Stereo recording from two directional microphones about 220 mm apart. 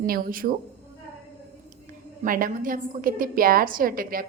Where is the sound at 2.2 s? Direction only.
40° right (ahead or behind).